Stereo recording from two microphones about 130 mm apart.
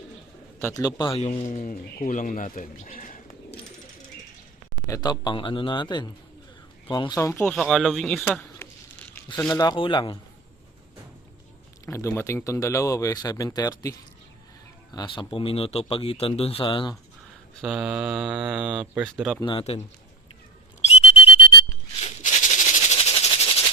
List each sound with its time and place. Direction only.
0.7 s speech: 30° left (ahead or behind)
1.2 s speech: 55° left (ahead or behind); by 3.2 s 90° left
4.9 s speech: 30° left (ahead or behind)
7.1 s speech: 20° left (ahead or behind)
7.5 s speech: centre (ahead or behind)
8.4 s a sound: 15° left (ahead or behind)
9.5 s speech: 30° left (ahead or behind)
11.9 s speech: 20° left (ahead or behind)
14.9 s speech: 40° left (ahead or behind)
17.6 s speech: 5° right (ahead or behind)
19.4 s speech: 40° left (ahead or behind)
20.9 s whistle: 50° left (ahead or behind)
22.0 s a sound: 70° left (ahead or behind)
23.1 s a sound: 45° left (ahead or behind)